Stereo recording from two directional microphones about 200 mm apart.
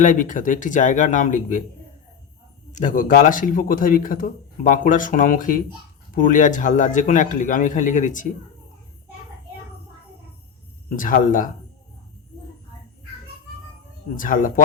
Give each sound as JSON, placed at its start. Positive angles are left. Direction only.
{"t": 0.0, "sound": "speech", "side_deg": 40}
{"t": 2.7, "sound": "a man's voice", "side_deg": 40}
{"t": 10.9, "sound": "a man's voice", "side_deg": 40}
{"t": 14.2, "sound": "speech", "side_deg": 40}